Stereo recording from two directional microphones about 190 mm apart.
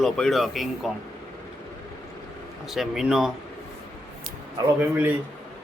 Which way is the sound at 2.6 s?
Centre (ahead or behind).